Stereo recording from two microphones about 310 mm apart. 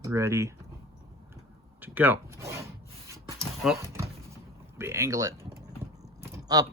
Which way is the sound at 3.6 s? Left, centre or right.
Centre.